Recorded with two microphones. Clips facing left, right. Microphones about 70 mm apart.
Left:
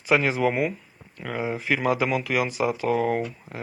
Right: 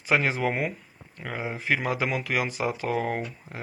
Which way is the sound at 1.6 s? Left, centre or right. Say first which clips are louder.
Left 3 dB; right.